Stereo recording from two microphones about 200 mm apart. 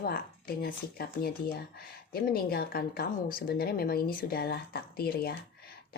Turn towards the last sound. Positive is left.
turn(degrees=50)  # may be behind; listen again after turning